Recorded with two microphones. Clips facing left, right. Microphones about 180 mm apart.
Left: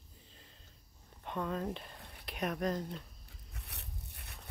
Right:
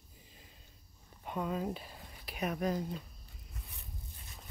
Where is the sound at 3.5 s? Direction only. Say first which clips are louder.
Left 1 dB; 75° left (ahead or behind).